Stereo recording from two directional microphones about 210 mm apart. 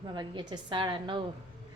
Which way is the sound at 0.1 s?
20° right (ahead or behind).